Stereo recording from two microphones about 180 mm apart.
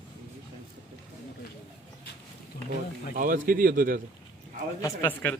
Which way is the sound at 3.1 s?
50° right (ahead or behind).